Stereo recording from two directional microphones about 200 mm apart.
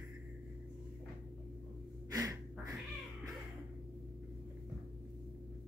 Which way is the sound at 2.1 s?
15° right (ahead or behind).